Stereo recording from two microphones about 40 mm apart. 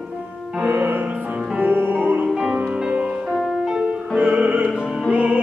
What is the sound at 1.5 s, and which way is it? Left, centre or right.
Music, right.